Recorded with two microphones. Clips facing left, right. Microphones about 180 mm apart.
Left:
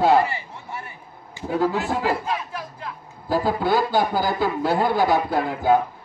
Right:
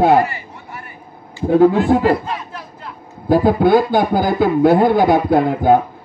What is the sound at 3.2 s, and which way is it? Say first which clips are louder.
Speech: right 9 dB; 55° right (ahead or behind).